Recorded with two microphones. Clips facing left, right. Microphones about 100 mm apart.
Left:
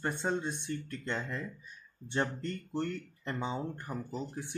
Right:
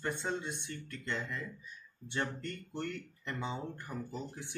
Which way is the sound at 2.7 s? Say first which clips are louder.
Left 5 dB; 30° left (ahead or behind).